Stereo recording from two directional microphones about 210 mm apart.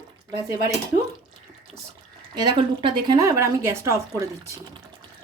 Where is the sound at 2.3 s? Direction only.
20° right (ahead or behind).